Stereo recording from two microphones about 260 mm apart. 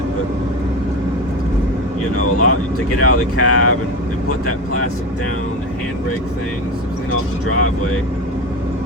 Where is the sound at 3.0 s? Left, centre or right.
Left.